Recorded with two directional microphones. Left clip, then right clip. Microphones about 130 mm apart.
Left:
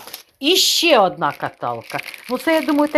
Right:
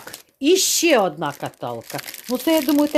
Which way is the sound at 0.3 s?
60° right (ahead or behind).